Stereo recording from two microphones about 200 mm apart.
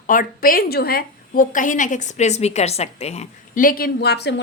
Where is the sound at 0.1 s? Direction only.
45° left (ahead or behind).